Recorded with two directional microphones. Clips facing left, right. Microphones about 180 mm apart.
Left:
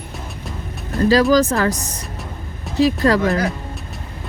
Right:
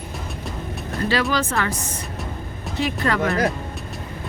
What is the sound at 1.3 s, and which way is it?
Speech, 40° left (ahead or behind).